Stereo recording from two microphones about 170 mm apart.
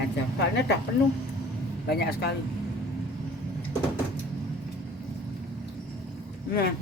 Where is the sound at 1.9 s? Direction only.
70° left (ahead or behind).